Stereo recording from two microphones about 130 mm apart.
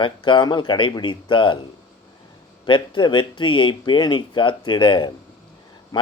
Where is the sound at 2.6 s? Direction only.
35° left (ahead or behind).